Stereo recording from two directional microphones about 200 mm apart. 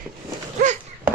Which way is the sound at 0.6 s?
40° right (ahead or behind).